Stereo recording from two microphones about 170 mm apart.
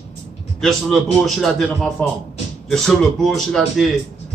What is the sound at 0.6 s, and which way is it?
Speech, centre (ahead or behind).